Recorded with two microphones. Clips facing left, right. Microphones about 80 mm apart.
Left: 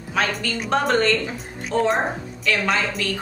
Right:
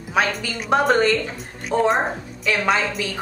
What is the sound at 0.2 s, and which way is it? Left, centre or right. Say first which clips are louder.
A woman's voice: right 2 dB; centre.